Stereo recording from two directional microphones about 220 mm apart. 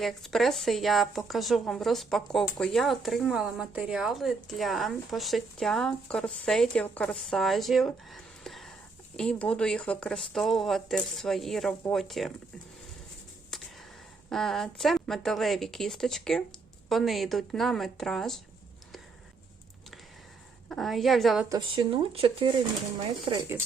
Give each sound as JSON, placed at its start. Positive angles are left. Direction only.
{"t": 0.0, "sound": "speech", "side_deg": 0}
{"t": 13.5, "sound": "a sound", "side_deg": 0}
{"t": 14.3, "sound": "speech", "side_deg": 0}
{"t": 20.7, "sound": "speech", "side_deg": 0}
{"t": 21.5, "sound": "speech", "side_deg": -20}